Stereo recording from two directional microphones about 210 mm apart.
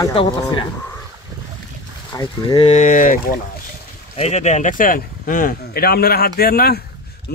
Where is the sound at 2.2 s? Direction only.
25° left (ahead or behind).